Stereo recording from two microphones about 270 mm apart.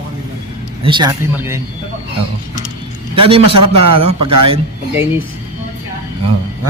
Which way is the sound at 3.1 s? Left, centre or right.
Centre.